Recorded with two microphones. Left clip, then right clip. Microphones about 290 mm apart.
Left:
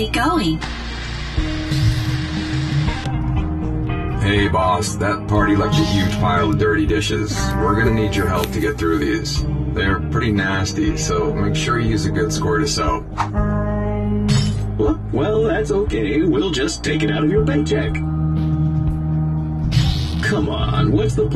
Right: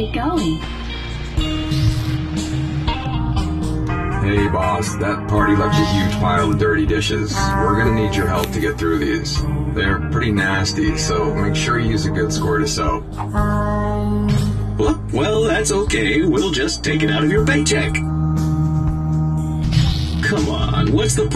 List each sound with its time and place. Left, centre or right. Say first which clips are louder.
0.1 s speech: left 3 dB; left
4.3 s speech: left 2 dB; centre
13.4 s music: right 3 dB; right
14.8 s music: right 1 dB; right
16.3 s speech: right 1 dB; centre
17.2 s speech: right 1 dB; right
19.7 s music: left 1 dB; centre
20.9 s speech: right 1 dB; right